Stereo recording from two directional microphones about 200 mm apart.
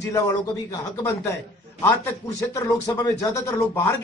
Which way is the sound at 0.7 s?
15° left (ahead or behind).